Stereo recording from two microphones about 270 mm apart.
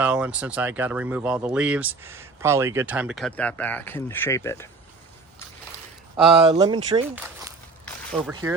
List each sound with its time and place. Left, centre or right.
0.0 s speech: centre
6.1 s speech: centre
8.3 s speech: centre